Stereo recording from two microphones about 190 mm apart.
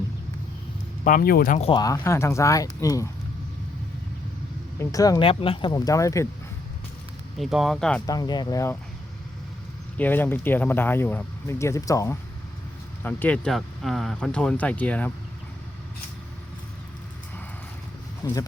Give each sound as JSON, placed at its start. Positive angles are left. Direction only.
{"t": 1.0, "sound": "speech", "side_deg": 45}
{"t": 1.7, "sound": "speech", "side_deg": 20}
{"t": 4.8, "sound": "speech", "side_deg": 15}
{"t": 7.3, "sound": "speech", "side_deg": 0}
{"t": 8.0, "sound": "speech", "side_deg": 20}
{"t": 10.0, "sound": "speech", "side_deg": 10}
{"t": 18.2, "sound": "speech", "side_deg": 20}